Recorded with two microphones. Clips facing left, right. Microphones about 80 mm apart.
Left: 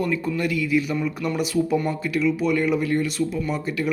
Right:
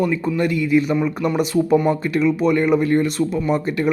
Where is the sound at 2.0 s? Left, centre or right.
Right.